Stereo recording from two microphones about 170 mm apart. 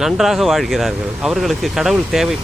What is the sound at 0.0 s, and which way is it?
Speech, centre (ahead or behind).